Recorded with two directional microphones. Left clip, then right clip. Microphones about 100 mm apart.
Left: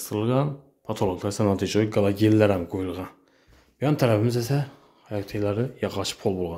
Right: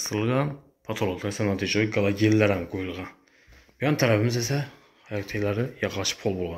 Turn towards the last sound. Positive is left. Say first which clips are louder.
# left 1 dB
turn(degrees=40)  # may be behind; listen again after turning